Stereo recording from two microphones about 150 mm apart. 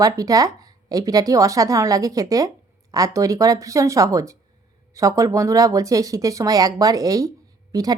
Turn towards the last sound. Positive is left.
turn(degrees=-25)  # may be behind; listen again after turning